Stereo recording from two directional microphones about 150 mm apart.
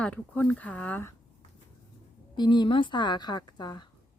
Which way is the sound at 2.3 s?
30° left (ahead or behind).